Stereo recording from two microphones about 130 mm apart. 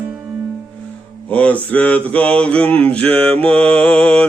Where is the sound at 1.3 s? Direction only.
10° left (ahead or behind).